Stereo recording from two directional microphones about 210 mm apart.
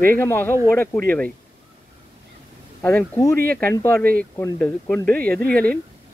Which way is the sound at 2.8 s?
10° left (ahead or behind).